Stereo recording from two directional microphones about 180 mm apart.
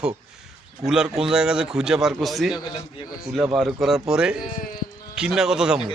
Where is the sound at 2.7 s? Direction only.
25° left (ahead or behind).